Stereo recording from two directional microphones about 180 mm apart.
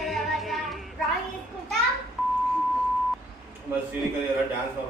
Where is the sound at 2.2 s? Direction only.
Centre (ahead or behind).